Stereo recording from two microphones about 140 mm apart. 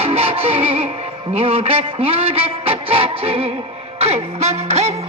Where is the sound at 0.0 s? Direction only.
45° right (ahead or behind).